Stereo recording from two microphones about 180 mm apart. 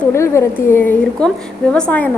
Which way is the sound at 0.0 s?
15° left (ahead or behind).